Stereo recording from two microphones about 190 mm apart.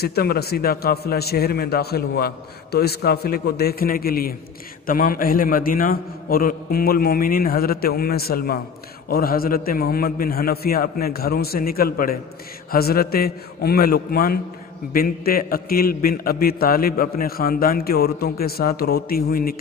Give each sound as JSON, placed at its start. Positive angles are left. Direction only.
{"t": 0.0, "sound": "a man's voice", "side_deg": 55}